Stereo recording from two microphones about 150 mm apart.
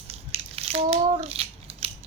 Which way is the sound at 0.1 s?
40° right (ahead or behind).